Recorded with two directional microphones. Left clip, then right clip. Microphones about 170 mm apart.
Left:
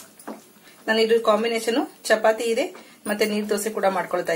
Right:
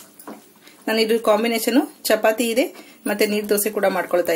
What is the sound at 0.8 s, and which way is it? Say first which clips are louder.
Speech: even; 50° right (ahead or behind).